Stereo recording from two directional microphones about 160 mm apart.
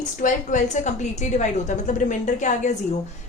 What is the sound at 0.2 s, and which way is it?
A woman's voice, 50° left (ahead or behind).